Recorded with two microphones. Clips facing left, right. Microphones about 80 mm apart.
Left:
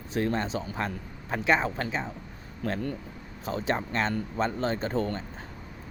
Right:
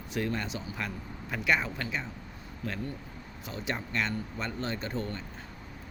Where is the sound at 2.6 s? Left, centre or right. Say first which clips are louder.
Left 6 dB; left.